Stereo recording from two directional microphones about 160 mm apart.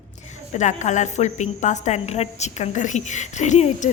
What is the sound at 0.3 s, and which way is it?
A woman's voice, 50° left (ahead or behind).